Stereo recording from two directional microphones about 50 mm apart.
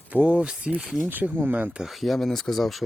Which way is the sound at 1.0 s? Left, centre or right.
Right.